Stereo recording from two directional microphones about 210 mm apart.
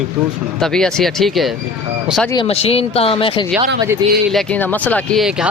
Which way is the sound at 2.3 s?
30° left (ahead or behind).